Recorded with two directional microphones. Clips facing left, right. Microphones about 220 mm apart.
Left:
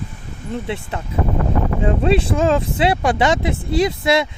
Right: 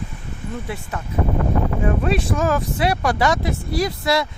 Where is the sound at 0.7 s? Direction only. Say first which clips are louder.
Left 3 dB; 30° left (ahead or behind).